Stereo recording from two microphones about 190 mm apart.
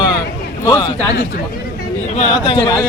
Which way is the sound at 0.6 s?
15° left (ahead or behind).